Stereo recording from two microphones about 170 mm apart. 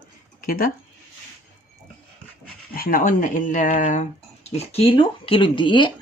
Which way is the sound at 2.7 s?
55° left (ahead or behind).